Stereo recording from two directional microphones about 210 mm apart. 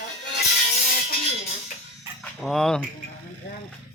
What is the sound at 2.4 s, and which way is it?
Speech, centre (ahead or behind).